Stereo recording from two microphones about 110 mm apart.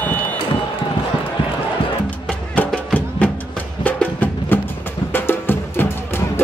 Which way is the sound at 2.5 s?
10° left (ahead or behind).